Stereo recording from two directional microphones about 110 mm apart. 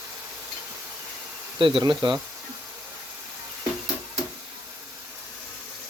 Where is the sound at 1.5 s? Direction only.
50° right (ahead or behind).